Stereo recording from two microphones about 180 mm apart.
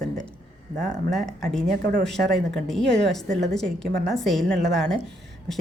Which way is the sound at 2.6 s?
Centre (ahead or behind).